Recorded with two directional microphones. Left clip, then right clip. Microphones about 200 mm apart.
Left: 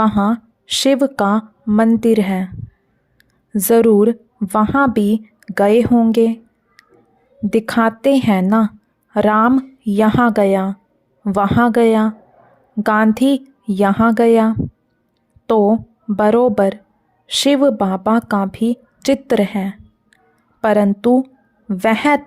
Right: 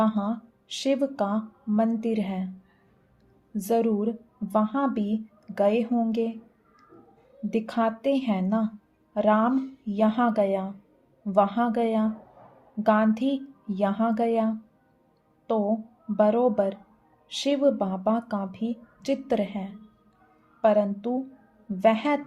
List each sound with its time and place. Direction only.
0.0 s speech: 55° left (ahead or behind)
3.5 s a woman's voice: 55° left (ahead or behind)